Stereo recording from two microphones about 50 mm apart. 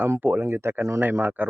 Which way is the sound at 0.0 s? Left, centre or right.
Right.